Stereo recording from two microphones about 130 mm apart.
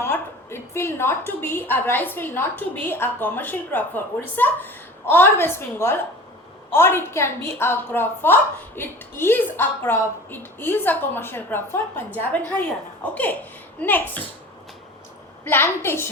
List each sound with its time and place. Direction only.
0.0 s a woman's voice: 20° left (ahead or behind)
15.4 s a woman's voice: 20° left (ahead or behind)